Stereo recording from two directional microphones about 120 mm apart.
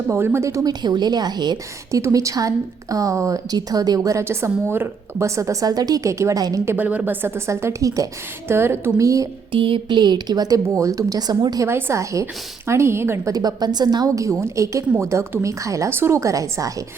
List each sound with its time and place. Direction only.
0.1 s speech: 20° right (ahead or behind); by 2.0 s 35° right (ahead or behind)
2.0 s a woman's voice: 25° right (ahead or behind)
6.7 s a woman's voice: 15° right (ahead or behind)
9.5 s a woman's voice: 45° right (ahead or behind); by 13.3 s 20° right (ahead or behind)
13.3 s a woman's voice: 35° right (ahead or behind)